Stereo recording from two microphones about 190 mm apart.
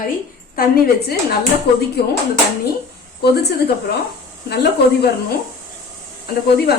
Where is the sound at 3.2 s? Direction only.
60° left (ahead or behind).